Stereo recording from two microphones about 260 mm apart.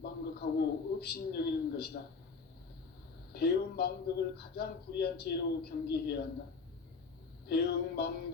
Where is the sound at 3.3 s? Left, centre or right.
Left.